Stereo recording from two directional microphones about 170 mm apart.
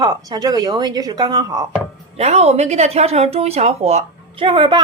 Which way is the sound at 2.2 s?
40° right (ahead or behind).